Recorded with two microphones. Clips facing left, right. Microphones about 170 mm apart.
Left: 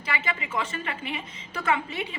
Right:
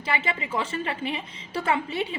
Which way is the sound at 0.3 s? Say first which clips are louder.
Right 2 dB; 30° right (ahead or behind).